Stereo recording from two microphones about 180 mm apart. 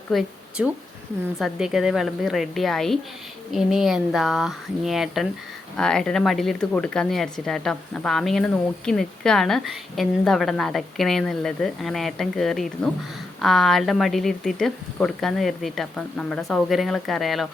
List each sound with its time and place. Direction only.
0.1 s speech: centre (ahead or behind)